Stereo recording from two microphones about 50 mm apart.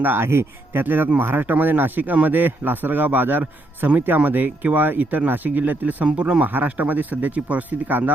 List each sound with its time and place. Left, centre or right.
0.0 s speech: right